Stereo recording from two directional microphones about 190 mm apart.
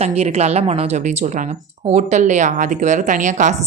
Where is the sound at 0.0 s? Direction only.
35° right (ahead or behind).